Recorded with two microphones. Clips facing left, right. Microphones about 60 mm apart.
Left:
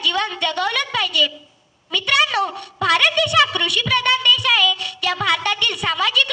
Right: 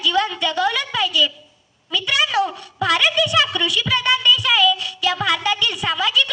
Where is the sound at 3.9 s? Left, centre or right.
Left.